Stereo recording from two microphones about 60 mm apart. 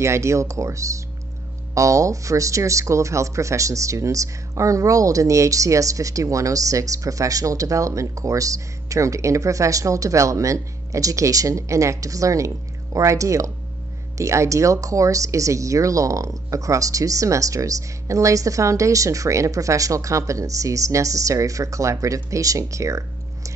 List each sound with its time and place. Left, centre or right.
0.0 s speech: right